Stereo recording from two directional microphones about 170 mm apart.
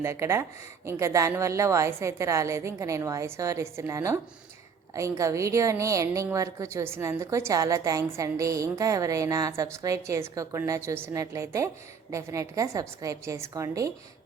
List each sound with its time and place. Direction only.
0.0 s a woman's voice: 15° right (ahead or behind)